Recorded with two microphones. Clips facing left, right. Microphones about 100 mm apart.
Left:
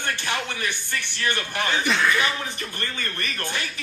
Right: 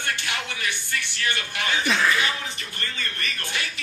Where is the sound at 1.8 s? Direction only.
Centre (ahead or behind).